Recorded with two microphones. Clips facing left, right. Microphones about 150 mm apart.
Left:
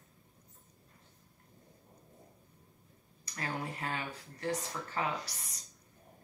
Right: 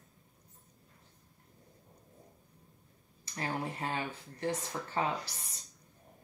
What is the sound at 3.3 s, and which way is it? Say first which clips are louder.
Speech: right 2 dB; 30° right (ahead or behind).